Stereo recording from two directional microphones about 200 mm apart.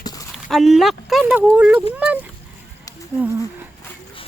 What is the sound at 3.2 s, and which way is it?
Speech, 10° right (ahead or behind).